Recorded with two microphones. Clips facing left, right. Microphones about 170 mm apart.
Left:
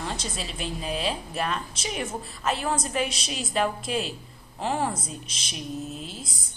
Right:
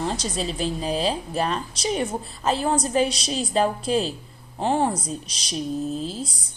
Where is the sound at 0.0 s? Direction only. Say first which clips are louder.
Right 7 dB; 35° right (ahead or behind).